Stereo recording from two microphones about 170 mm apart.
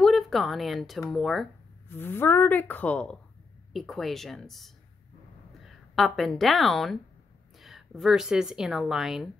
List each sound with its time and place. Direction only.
0.0 s speech: centre (ahead or behind)
1.9 s a woman's voice: 15° left (ahead or behind); by 9.3 s 5° right (ahead or behind)